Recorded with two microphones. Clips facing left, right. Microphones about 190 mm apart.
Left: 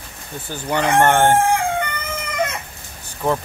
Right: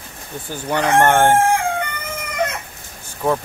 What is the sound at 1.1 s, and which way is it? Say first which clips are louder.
Speech: right 1 dB; 10° right (ahead or behind).